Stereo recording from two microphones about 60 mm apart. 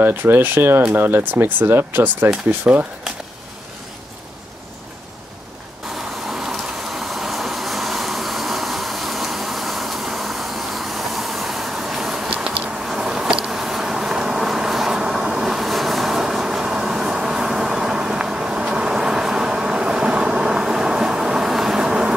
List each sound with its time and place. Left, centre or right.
0.0 s speech: right
6.3 s a sound: centre
12.8 s vehicle: centre